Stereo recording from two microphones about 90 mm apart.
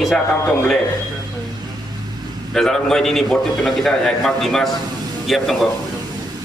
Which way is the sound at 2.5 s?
5° left (ahead or behind).